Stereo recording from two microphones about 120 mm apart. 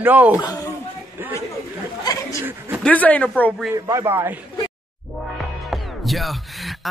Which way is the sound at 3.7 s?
25° right (ahead or behind).